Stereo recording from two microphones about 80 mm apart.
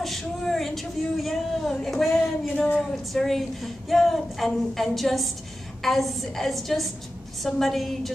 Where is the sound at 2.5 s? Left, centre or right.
Centre.